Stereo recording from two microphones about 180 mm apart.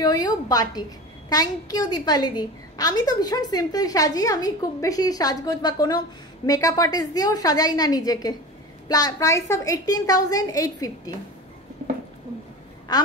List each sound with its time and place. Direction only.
0.0 s a woman's voice: 20° left (ahead or behind)
12.9 s a woman's voice: 20° left (ahead or behind)